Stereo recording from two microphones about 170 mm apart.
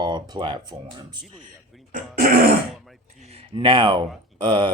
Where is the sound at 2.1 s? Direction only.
60° right (ahead or behind).